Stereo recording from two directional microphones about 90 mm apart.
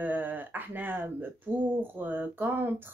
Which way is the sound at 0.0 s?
20° right (ahead or behind).